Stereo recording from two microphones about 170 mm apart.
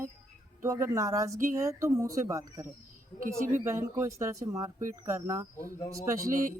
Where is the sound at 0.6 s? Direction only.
15° right (ahead or behind).